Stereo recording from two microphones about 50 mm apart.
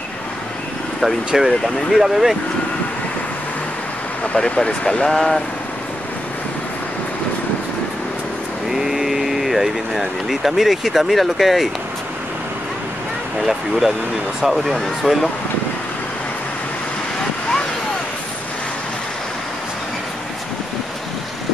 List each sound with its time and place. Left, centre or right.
1.0 s speech: centre
4.6 s speech: centre
8.6 s speech: centre
13.4 s speech: centre